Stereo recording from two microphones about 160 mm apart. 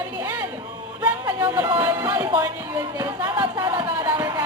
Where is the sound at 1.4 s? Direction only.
15° right (ahead or behind).